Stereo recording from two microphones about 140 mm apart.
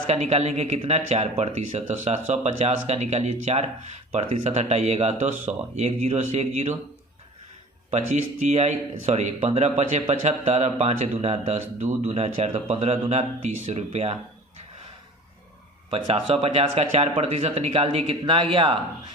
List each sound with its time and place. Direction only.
0.1 s speech: 50° right (ahead or behind)
7.9 s speech: 55° right (ahead or behind)
15.9 s speech: 45° right (ahead or behind)